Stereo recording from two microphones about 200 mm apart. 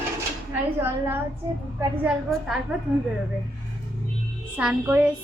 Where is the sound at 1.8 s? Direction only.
5° right (ahead or behind).